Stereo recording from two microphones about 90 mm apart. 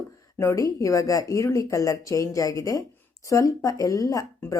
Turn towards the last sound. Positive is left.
turn(degrees=40)  # may be behind; listen again after turning